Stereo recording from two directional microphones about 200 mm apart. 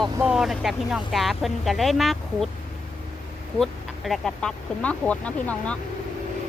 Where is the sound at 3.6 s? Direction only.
Centre (ahead or behind).